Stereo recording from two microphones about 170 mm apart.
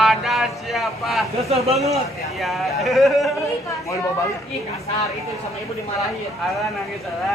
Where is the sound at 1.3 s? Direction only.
35° right (ahead or behind).